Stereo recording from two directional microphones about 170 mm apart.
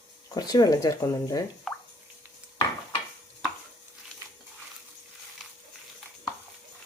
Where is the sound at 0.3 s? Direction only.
20° left (ahead or behind).